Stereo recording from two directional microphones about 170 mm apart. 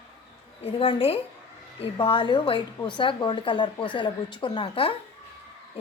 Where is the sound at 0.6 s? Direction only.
30° left (ahead or behind).